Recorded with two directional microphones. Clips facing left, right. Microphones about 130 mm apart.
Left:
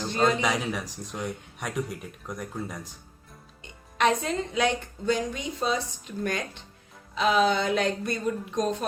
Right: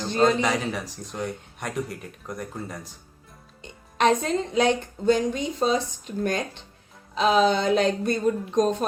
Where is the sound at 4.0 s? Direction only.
30° right (ahead or behind).